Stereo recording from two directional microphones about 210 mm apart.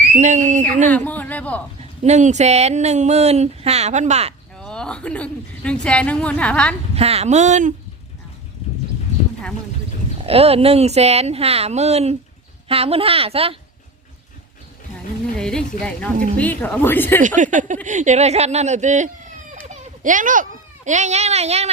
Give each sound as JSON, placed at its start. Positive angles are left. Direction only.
{"t": 0.2, "sound": "speech", "side_deg": -35}
{"t": 0.9, "sound": "a man's voice", "side_deg": 5}
{"t": 1.8, "sound": "speech", "side_deg": -35}
{"t": 4.6, "sound": "a woman's voice", "side_deg": 5}
{"t": 6.9, "sound": "speech", "side_deg": -30}
{"t": 10.2, "sound": "speech", "side_deg": -30}
{"t": 15.4, "sound": "a woman's voice", "side_deg": 5}
{"t": 17.2, "sound": "speech", "side_deg": -35}